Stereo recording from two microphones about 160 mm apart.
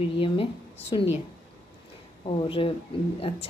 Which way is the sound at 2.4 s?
35° left (ahead or behind).